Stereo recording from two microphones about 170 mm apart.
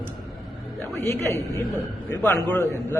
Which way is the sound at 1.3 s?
15° left (ahead or behind).